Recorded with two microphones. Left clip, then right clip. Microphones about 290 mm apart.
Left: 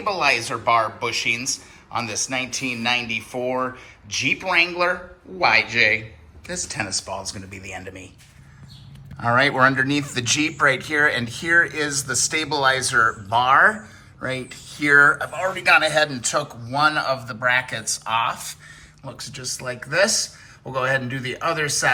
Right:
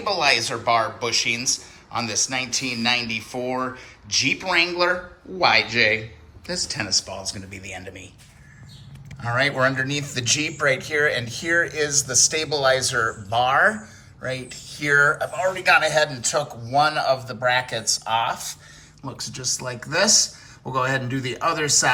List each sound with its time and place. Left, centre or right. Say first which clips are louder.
0.0 s speech: even; centre
9.2 s speech: left 4 dB; centre
19.0 s speech: right 3 dB; centre